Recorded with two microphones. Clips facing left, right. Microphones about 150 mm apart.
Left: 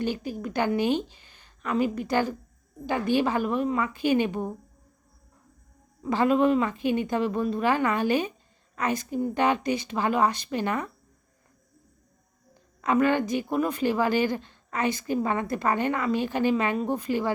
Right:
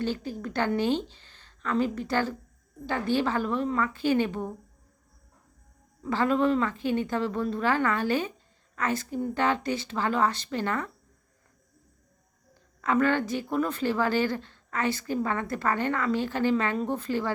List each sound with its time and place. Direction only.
0.0 s a woman's voice: 15° left (ahead or behind)
6.0 s a woman's voice: 15° left (ahead or behind)
12.5 s a woman's voice: 15° left (ahead or behind)